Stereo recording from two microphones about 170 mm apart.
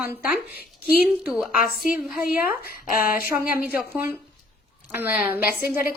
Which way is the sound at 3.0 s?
55° left (ahead or behind).